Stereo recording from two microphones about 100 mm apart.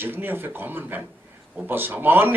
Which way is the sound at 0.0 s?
20° right (ahead or behind).